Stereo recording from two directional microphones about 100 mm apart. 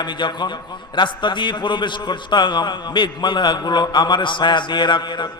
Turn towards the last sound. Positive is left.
turn(degrees=50)  # may be behind; listen again after turning